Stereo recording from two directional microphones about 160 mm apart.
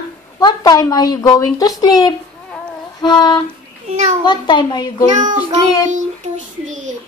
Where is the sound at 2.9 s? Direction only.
25° left (ahead or behind).